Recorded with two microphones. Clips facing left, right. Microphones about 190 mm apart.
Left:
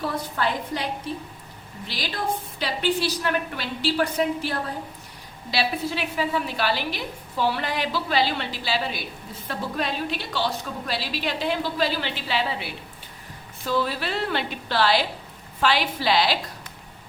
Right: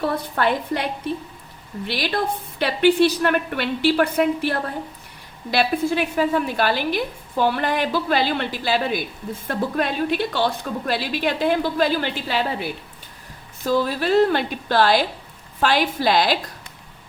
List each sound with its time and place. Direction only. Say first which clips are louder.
0.0 s a woman's voice: right 5 dB; 60° right (ahead or behind)